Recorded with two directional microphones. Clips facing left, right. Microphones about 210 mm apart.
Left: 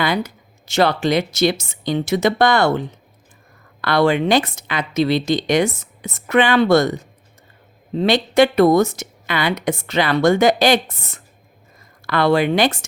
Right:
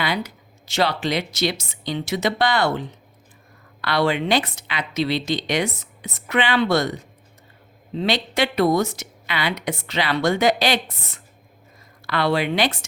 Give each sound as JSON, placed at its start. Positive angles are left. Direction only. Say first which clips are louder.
{"t": 0.0, "sound": "speech", "louder": "left 5 dB", "side_deg": 45}